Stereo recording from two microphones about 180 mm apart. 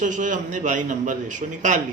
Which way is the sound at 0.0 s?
45° right (ahead or behind).